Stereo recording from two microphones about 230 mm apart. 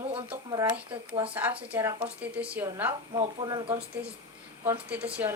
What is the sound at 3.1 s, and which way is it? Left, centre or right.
Speech, right.